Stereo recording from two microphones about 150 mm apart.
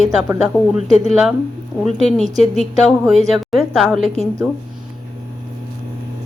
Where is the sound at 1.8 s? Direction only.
Centre (ahead or behind).